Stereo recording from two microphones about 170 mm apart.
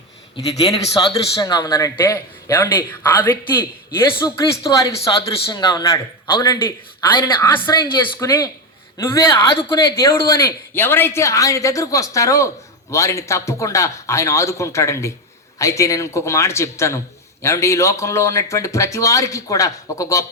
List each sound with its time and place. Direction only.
0.5 s a man's voice: 20° left (ahead or behind)